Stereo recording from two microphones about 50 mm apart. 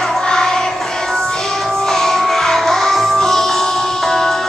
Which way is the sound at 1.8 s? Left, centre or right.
Centre.